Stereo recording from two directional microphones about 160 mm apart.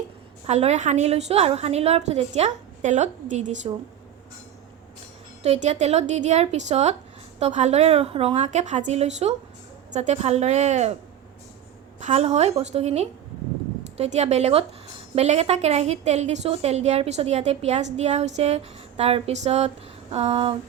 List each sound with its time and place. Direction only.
0.4 s a woman's voice: 45° right (ahead or behind)
5.4 s a woman's voice: 45° right (ahead or behind)
11.9 s a woman's voice: 45° right (ahead or behind)